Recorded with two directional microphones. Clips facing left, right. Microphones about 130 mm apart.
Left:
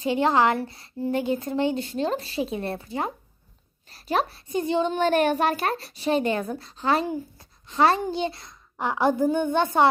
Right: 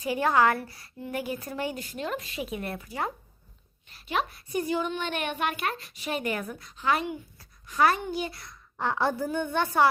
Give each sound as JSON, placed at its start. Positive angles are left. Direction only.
{"t": 0.0, "sound": "a woman's voice", "side_deg": 25}
{"t": 3.8, "sound": "a woman's voice", "side_deg": 35}